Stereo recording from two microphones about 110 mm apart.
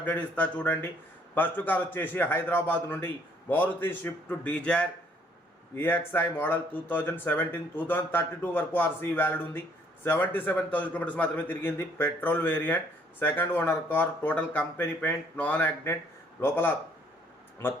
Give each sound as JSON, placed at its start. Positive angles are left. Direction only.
{"t": 0.0, "sound": "a man's voice", "side_deg": 15}